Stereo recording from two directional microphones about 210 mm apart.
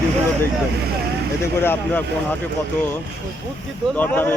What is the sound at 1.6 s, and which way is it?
Speech, 10° left (ahead or behind).